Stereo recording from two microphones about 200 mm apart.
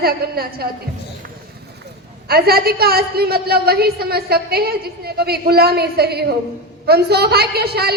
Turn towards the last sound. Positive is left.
turn(degrees=-50)  # may be behind; listen again after turning